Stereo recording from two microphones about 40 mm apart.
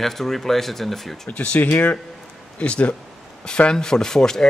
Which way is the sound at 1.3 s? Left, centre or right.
Left.